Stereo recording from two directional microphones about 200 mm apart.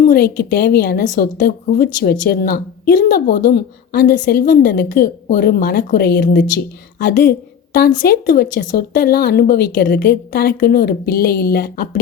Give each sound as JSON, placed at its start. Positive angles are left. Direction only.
{"t": 0.0, "sound": "a woman's voice", "side_deg": 50}